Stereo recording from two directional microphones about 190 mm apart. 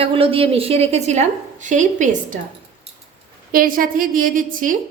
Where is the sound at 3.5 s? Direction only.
50° right (ahead or behind).